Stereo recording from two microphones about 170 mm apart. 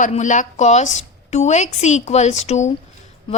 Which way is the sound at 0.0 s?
45° left (ahead or behind).